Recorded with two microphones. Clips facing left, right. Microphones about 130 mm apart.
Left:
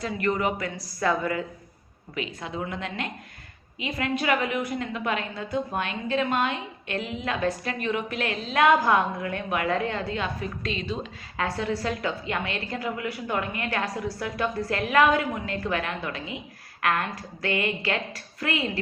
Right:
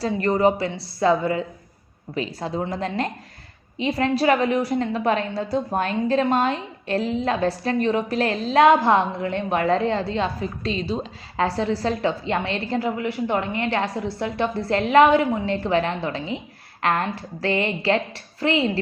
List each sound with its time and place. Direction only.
0.0 s a woman's voice: 35° right (ahead or behind)